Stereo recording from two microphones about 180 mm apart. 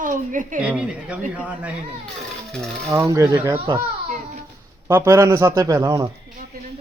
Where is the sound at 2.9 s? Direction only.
15° right (ahead or behind).